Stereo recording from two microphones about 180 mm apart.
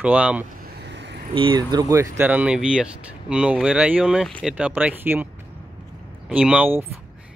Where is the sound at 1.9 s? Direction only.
10° right (ahead or behind).